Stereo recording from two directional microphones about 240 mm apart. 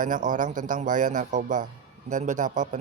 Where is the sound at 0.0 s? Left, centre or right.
Right.